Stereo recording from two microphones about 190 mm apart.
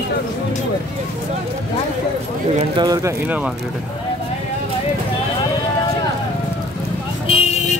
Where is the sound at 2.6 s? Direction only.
25° right (ahead or behind).